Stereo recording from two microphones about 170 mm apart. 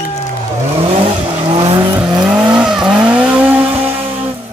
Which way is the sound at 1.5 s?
30° right (ahead or behind).